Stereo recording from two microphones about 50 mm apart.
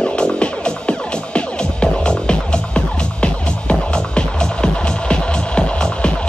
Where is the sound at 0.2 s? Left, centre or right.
Left.